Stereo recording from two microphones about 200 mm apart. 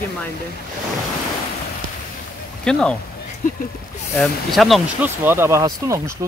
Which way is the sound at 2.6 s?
5° left (ahead or behind).